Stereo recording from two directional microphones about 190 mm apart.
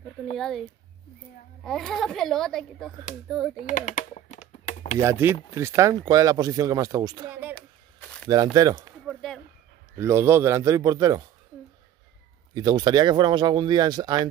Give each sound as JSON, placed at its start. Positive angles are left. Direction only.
{"t": 0.4, "sound": "a child's voice", "side_deg": 0}
{"t": 3.5, "sound": "speech", "side_deg": 40}
{"t": 4.5, "sound": "computer keyboard", "side_deg": 35}
{"t": 5.2, "sound": "speech", "side_deg": -15}
{"t": 8.5, "sound": "speech", "side_deg": -20}
{"t": 9.0, "sound": "a sound", "side_deg": 0}
{"t": 9.9, "sound": "speech", "side_deg": -15}
{"t": 12.5, "sound": "speech", "side_deg": -20}